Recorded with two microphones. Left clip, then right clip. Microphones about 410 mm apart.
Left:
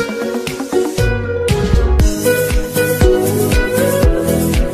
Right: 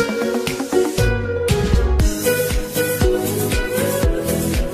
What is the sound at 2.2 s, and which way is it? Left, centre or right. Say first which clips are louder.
Music: left 4 dB; left.